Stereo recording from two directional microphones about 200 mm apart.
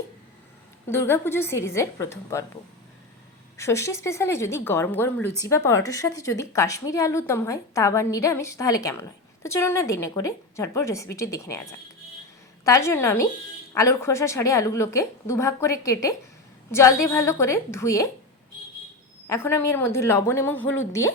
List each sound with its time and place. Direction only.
0.9 s a woman's voice: 10° left (ahead or behind)
3.6 s a woman's voice: 15° left (ahead or behind)
19.3 s a woman's voice: 10° left (ahead or behind)